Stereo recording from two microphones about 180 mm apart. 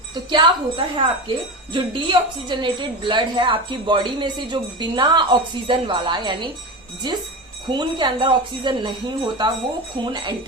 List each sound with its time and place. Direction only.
0.1 s a woman's voice: 25° right (ahead or behind)